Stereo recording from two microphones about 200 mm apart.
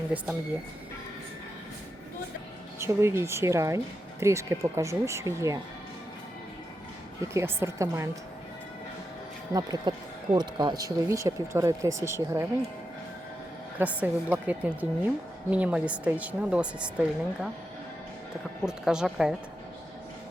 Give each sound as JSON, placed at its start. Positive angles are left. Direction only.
{"t": 2.7, "sound": "a woman's voice", "side_deg": -15}
{"t": 7.3, "sound": "a woman's voice", "side_deg": -15}
{"t": 9.5, "sound": "a woman's voice", "side_deg": -20}
{"t": 13.7, "sound": "a woman's voice", "side_deg": -5}
{"t": 18.6, "sound": "speech", "side_deg": -5}